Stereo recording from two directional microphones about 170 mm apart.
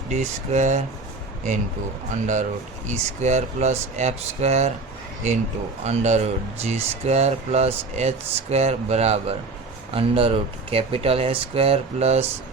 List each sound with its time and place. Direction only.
0.1 s speech: 45° right (ahead or behind)
2.2 s speech: 45° right (ahead or behind)
5.8 s speech: 40° right (ahead or behind)